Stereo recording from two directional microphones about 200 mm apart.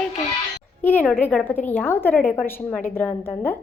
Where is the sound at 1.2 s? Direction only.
5° left (ahead or behind).